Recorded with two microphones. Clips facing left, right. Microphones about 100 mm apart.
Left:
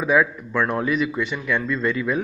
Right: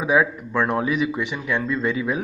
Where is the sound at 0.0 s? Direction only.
10° right (ahead or behind).